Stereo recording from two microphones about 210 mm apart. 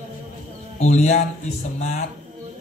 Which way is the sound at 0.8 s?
35° left (ahead or behind).